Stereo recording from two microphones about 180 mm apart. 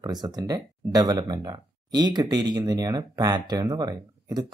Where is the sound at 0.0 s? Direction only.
20° right (ahead or behind).